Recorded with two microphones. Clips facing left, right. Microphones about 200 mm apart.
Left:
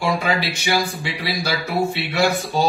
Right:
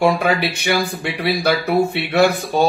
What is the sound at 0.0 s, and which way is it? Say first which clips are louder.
Speech: right 5 dB; 60° right (ahead or behind).